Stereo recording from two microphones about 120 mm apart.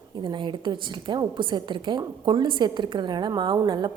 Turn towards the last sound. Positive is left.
turn(degrees=-35)  # may be behind; listen again after turning